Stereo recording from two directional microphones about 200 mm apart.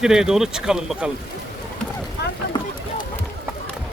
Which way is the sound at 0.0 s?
5° right (ahead or behind).